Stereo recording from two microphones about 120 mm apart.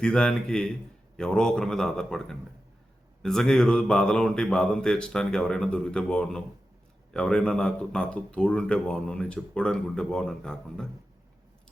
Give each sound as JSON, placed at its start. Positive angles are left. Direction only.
{"t": 0.0, "sound": "a man's voice", "side_deg": 10}